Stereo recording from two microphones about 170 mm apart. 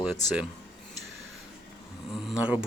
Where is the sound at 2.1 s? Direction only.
Centre (ahead or behind).